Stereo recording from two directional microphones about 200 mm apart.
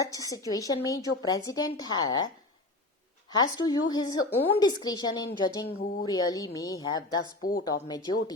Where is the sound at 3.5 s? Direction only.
20° left (ahead or behind).